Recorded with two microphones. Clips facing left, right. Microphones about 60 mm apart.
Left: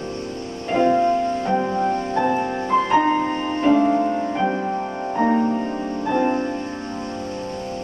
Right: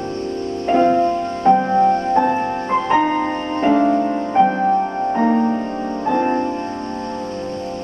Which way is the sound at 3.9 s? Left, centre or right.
Centre.